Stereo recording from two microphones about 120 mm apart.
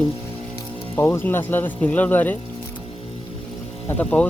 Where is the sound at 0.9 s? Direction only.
20° left (ahead or behind).